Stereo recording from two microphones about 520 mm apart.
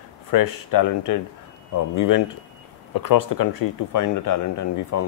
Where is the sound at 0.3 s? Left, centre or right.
Left.